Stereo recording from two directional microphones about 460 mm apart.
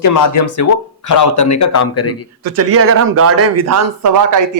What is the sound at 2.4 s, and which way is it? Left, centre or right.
Speech, right.